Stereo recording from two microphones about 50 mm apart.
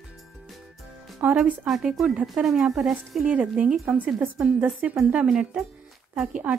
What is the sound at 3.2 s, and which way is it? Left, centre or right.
Speech, right.